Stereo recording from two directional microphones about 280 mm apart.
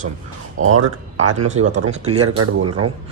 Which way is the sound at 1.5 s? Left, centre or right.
Right.